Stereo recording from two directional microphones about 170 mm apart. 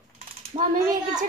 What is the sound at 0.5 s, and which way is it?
Speech, 40° right (ahead or behind).